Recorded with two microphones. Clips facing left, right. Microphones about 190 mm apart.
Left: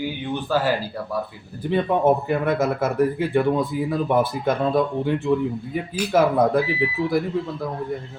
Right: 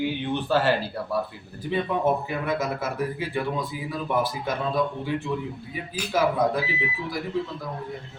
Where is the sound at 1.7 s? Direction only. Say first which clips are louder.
Left 5 dB; 55° left (ahead or behind).